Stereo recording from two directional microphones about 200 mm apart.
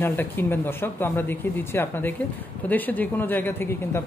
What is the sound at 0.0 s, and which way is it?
Speech, 10° left (ahead or behind).